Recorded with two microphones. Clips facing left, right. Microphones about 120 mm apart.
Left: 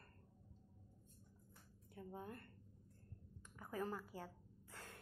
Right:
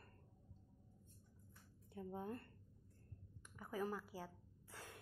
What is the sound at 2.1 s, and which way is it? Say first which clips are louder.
Speech: right 4 dB; 25° right (ahead or behind).